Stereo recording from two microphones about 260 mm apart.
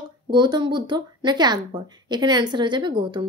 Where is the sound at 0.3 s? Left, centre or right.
Centre.